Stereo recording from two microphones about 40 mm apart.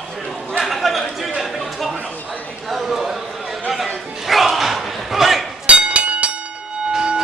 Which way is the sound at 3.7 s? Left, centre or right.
Centre.